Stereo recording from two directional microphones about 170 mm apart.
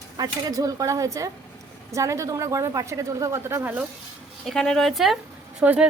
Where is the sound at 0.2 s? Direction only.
20° right (ahead or behind).